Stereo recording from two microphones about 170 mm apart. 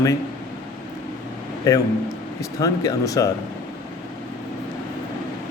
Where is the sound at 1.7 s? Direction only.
20° left (ahead or behind).